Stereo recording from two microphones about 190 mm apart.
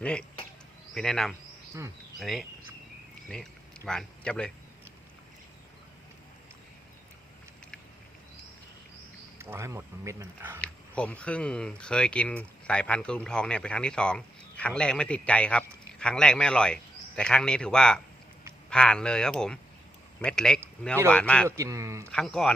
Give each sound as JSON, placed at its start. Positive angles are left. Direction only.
{"t": 0.0, "sound": "speech", "side_deg": 5}
{"t": 9.4, "sound": "speech", "side_deg": -15}
{"t": 10.6, "sound": "speech", "side_deg": 5}
{"t": 21.4, "sound": "speech", "side_deg": -15}
{"t": 22.1, "sound": "speech", "side_deg": 5}